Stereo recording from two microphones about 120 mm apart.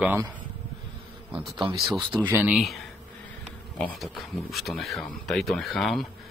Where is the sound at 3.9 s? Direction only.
Centre (ahead or behind).